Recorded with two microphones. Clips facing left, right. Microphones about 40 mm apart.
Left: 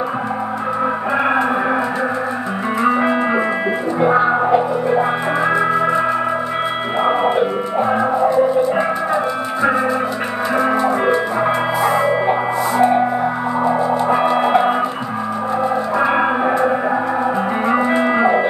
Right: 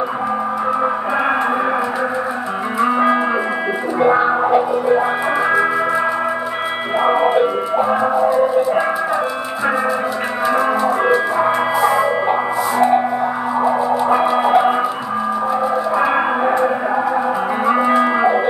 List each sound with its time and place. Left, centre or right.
2.8 s music: centre
5.4 s music: centre
7.0 s music: centre
16.0 s music: centre
17.9 s music: centre